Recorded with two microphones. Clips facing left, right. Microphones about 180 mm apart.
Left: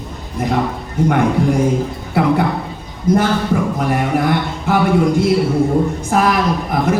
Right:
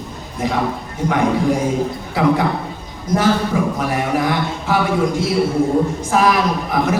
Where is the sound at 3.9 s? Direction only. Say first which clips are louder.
Left 2 dB; 55° left (ahead or behind).